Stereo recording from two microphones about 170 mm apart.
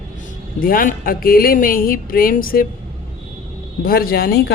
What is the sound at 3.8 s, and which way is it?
Speech, 60° left (ahead or behind).